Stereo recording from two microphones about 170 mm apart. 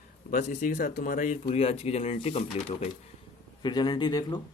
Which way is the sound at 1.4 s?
35° left (ahead or behind).